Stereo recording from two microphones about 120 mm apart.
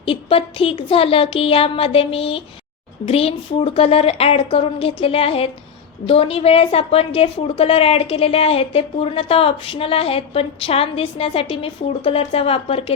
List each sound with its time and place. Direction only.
0.0 s a woman's voice: 50° left (ahead or behind)